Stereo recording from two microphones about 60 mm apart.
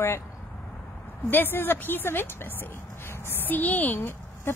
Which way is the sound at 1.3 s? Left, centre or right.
Left.